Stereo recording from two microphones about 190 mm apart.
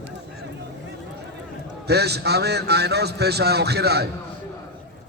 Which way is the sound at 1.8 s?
60° right (ahead or behind).